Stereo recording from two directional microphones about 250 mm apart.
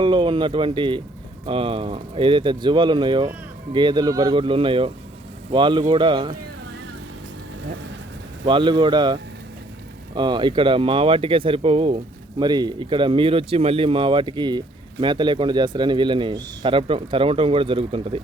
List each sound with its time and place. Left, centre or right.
0.0 s speech: centre
8.4 s speech: centre